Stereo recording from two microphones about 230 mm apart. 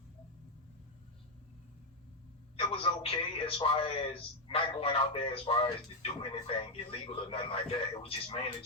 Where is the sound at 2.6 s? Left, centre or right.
Left.